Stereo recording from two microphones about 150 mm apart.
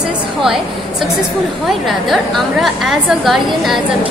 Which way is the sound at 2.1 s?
Centre (ahead or behind).